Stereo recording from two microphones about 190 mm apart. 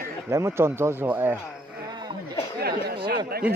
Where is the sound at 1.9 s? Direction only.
25° right (ahead or behind).